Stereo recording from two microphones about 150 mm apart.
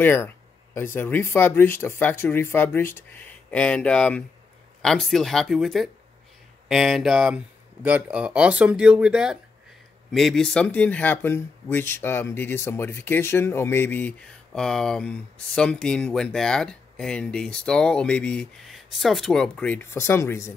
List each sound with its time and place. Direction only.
0.0 s speech: 15° left (ahead or behind)